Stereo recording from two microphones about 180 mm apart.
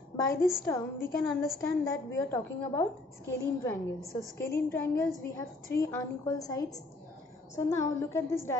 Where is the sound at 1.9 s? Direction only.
15° left (ahead or behind).